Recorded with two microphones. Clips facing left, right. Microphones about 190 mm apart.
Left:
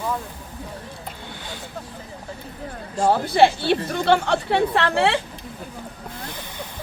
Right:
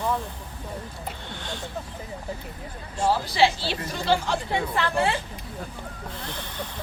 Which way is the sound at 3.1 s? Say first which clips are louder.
Left 5 dB; 55° left (ahead or behind).